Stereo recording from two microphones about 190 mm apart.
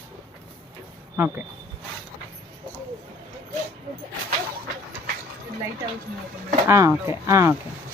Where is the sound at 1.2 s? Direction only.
15° right (ahead or behind).